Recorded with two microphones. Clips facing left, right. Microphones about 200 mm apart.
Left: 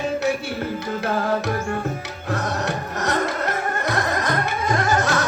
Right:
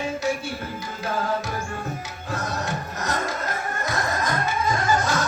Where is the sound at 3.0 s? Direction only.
70° left (ahead or behind).